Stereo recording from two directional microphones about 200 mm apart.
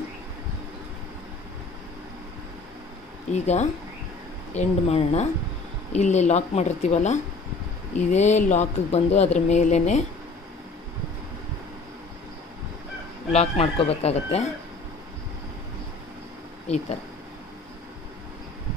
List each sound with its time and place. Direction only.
3.3 s speech: 35° left (ahead or behind)
13.3 s speech: 30° left (ahead or behind)